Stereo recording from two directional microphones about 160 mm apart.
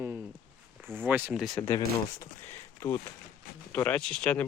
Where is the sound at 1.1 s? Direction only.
10° right (ahead or behind).